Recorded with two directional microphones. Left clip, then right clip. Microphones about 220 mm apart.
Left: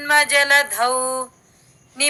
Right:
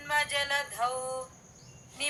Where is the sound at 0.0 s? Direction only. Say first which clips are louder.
Left 14 dB; 40° left (ahead or behind).